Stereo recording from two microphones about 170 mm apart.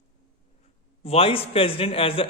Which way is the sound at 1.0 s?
35° left (ahead or behind).